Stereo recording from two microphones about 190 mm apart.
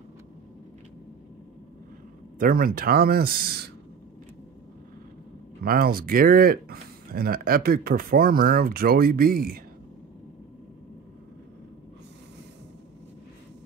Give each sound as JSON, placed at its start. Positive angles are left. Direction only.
{"t": 2.3, "sound": "speech", "side_deg": -50}
{"t": 5.6, "sound": "speech", "side_deg": -50}